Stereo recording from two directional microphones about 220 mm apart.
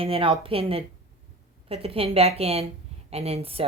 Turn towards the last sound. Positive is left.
turn(degrees=-25)  # may be behind; listen again after turning